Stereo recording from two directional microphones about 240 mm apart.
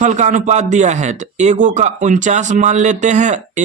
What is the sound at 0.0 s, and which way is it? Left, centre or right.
Speech, right.